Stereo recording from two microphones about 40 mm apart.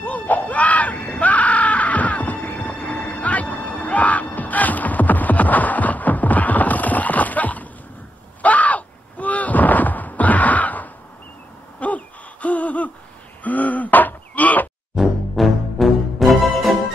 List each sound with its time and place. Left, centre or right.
0.0 s screaming: left
8.4 s a sound: left
11.8 s gasp: left
13.4 s throat clearing: left
15.0 s music: centre